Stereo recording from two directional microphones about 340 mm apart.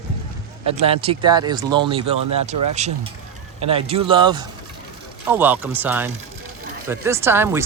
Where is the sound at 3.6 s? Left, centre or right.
Centre.